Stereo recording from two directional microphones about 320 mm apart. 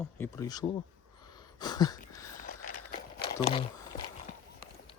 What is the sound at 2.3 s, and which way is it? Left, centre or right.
Biting, left.